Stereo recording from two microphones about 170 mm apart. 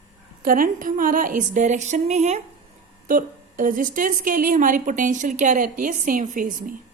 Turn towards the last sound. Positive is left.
turn(degrees=-50)  # may be behind; listen again after turning